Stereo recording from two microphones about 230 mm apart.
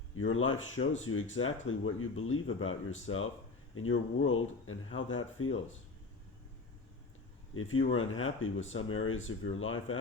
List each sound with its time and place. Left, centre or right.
0.2 s speech: left
7.5 s speech: left